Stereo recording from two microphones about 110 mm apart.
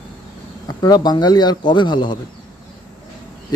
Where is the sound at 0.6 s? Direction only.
40° left (ahead or behind).